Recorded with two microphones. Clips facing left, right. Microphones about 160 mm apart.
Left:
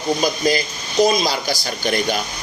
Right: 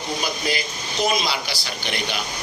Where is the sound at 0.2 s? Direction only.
40° left (ahead or behind).